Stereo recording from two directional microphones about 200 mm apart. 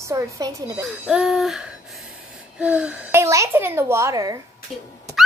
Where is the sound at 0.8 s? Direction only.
Centre (ahead or behind).